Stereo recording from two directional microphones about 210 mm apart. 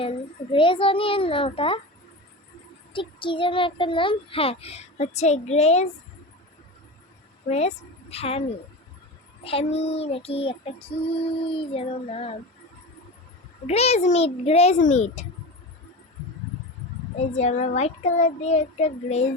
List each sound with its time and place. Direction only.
0.0 s a child's voice: 25° left (ahead or behind)
2.9 s a child's voice: 25° left (ahead or behind)
7.4 s a woman's voice: 30° left (ahead or behind)
13.7 s child singing: 30° left (ahead or behind)
17.3 s child singing: 35° left (ahead or behind)